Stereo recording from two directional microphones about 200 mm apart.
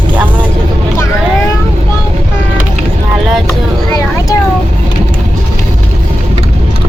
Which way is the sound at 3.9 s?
15° left (ahead or behind).